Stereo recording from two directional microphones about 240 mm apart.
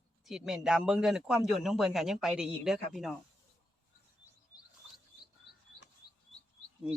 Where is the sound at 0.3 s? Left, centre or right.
Centre.